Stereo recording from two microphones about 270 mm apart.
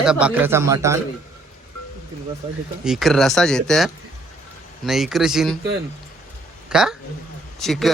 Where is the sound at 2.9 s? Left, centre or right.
Centre.